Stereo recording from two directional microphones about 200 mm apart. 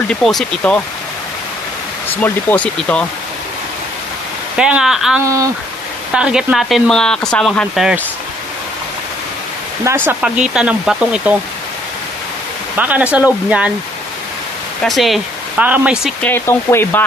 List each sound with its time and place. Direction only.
0.1 s speech: centre (ahead or behind)
2.2 s speech: 5° left (ahead or behind)
4.6 s speech: 5° right (ahead or behind)
5.2 s speech: 15° right (ahead or behind)
6.1 s speech: 5° right (ahead or behind)
9.8 s speech: 10° right (ahead or behind)
12.7 s speech: 10° right (ahead or behind)
14.8 s speech: centre (ahead or behind)
16.2 s speech: 10° left (ahead or behind)